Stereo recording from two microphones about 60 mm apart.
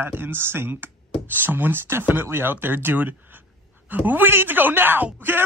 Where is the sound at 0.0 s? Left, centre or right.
Right.